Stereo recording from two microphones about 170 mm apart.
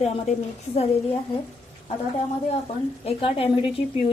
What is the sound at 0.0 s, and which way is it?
Speech, 35° left (ahead or behind).